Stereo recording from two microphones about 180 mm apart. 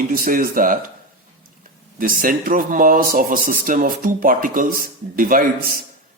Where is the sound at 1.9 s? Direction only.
50° right (ahead or behind).